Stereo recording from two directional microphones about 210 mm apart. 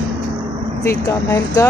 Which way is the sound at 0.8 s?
15° left (ahead or behind).